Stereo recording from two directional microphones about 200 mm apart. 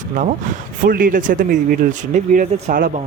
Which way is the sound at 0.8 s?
45° right (ahead or behind).